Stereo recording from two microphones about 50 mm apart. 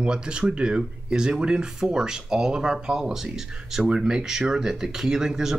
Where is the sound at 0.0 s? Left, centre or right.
Centre.